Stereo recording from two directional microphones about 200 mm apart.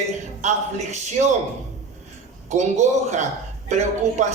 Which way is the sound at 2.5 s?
35° right (ahead or behind).